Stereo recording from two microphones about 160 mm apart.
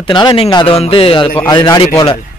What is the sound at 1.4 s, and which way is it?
Speech, 25° left (ahead or behind).